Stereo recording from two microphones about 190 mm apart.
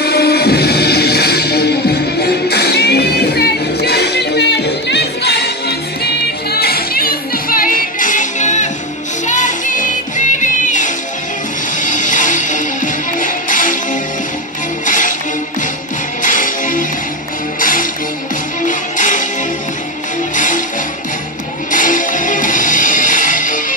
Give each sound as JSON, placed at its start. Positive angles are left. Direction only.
{"t": 0.0, "sound": "music", "side_deg": 55}
{"t": 14.9, "sound": "music", "side_deg": 45}
{"t": 16.2, "sound": "music", "side_deg": 45}
{"t": 20.3, "sound": "music", "side_deg": 45}
{"t": 21.7, "sound": "music", "side_deg": 45}